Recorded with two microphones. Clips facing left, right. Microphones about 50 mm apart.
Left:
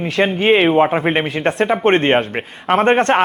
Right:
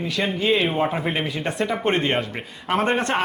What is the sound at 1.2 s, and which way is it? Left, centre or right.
Speech, left.